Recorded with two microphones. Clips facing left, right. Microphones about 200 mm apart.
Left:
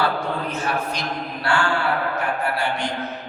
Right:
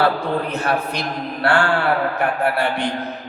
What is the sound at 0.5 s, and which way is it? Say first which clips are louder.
A man's voice: right 4 dB; 60° right (ahead or behind).